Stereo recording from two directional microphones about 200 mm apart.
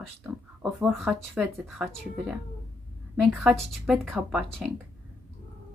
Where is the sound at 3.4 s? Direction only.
Centre (ahead or behind).